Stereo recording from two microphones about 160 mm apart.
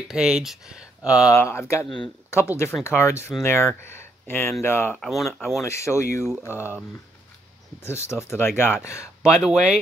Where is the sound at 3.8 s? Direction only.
15° left (ahead or behind).